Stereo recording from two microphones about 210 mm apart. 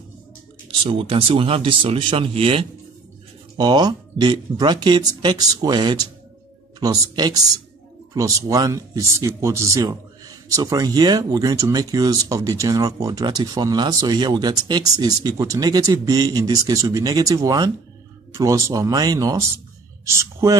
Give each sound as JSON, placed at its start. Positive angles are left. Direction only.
{"t": 0.7, "sound": "speech", "side_deg": -25}